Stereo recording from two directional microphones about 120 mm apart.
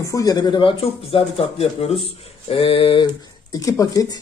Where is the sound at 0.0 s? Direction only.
30° left (ahead or behind); by 1.9 s 55° left (ahead or behind).